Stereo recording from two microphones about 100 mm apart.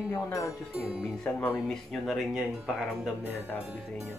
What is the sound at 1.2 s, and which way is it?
Speech, 20° left (ahead or behind).